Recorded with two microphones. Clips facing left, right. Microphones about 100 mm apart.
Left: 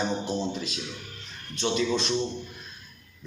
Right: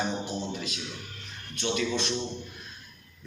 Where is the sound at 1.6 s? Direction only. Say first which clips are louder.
Left 3 dB; 30° left (ahead or behind).